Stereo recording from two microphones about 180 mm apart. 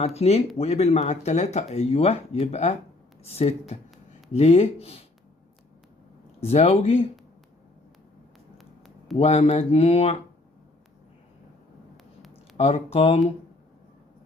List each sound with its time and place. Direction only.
0.0 s speech: 35° left (ahead or behind)
6.4 s speech: 35° left (ahead or behind)
8.5 s a sound: centre (ahead or behind)
9.1 s speech: 35° left (ahead or behind)
12.5 s speech: 35° left (ahead or behind)